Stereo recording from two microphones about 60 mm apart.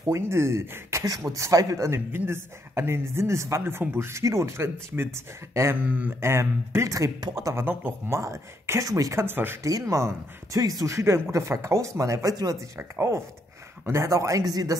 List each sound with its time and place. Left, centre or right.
0.1 s a woman's voice: right
1.3 s speech: right
2.0 s a woman's voice: right
3.6 s speech: right
4.2 s a woman's voice: right
5.8 s speech: right
6.2 s a woman's voice: right
6.9 s speech: right
7.5 s speech: right
8.1 s speech: right
9.1 s speech: right
9.6 s speech: right
12.7 s a woman's voice: right
14.5 s speech: right